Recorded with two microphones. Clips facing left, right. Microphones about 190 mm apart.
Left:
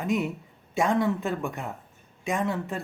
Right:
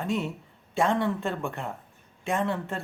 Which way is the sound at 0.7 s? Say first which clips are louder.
Left 1 dB; centre (ahead or behind).